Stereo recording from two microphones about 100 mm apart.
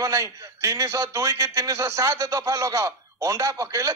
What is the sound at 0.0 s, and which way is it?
A man's voice, 30° right (ahead or behind).